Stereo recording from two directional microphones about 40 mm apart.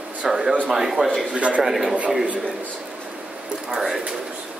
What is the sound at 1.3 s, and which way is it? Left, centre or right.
Speech, right.